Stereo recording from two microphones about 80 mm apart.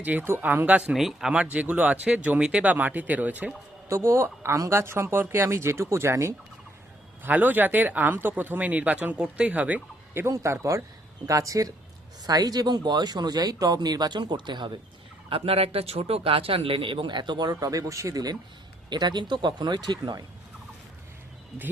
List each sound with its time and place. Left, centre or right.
0.0 s speech: right
0.9 s speech: centre
1.5 s speech: centre
3.8 s speech: right
7.3 s speech: right
10.2 s speech: right
16.7 s speech: right
17.5 s speech: right
18.9 s speech: right